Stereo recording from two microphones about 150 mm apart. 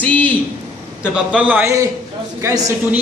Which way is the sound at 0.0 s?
10° left (ahead or behind).